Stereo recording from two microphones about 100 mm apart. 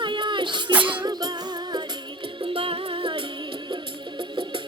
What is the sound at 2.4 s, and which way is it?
Music, 65° right (ahead or behind).